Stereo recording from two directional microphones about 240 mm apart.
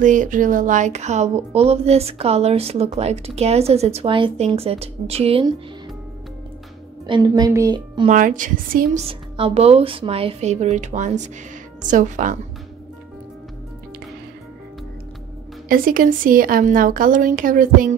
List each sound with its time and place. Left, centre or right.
0.0 s speech: right
7.1 s a woman's voice: centre
8.1 s speech: right
15.7 s speech: right